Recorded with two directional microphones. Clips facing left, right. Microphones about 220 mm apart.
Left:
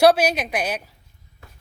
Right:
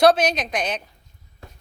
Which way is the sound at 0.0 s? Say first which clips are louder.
Left 1 dB; 10° left (ahead or behind).